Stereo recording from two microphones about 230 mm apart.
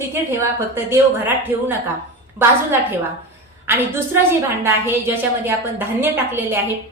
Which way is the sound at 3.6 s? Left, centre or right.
Centre.